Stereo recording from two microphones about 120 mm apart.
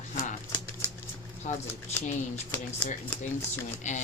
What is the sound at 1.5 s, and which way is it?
Speech, 90° left.